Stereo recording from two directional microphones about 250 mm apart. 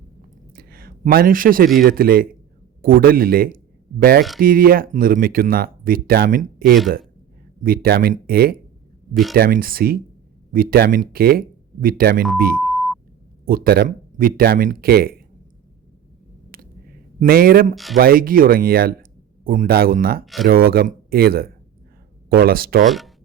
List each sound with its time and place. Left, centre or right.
0.5 s a sound: right
1.8 s speech: right
12.5 s a sound: centre
13.4 s speech: right
16.5 s a sound: right
17.9 s speech: right
20.2 s speech: centre
20.5 s speech: right
22.9 s speech: centre